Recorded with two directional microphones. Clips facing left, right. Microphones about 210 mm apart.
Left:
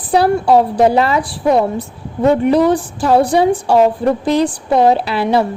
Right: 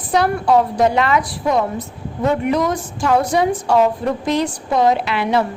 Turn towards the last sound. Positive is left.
turn(degrees=35)  # may be behind; listen again after turning